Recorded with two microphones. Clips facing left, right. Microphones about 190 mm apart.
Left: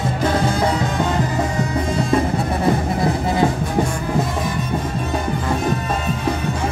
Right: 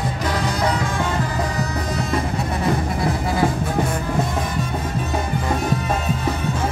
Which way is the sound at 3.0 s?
25° left (ahead or behind).